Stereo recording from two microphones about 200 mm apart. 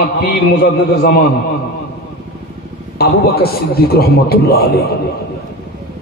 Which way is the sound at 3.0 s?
50° left (ahead or behind).